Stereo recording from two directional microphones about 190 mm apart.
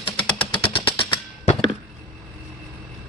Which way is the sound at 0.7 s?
25° left (ahead or behind).